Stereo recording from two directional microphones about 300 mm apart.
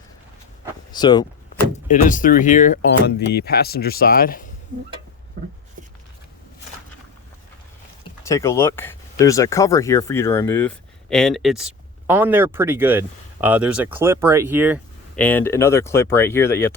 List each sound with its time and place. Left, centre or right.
0.9 s speech: centre
1.9 s speech: left
8.2 s speech: centre